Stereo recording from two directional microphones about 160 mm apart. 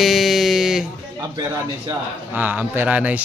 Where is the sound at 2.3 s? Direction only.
10° right (ahead or behind).